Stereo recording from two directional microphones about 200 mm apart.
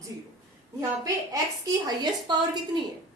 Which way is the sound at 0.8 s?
15° right (ahead or behind).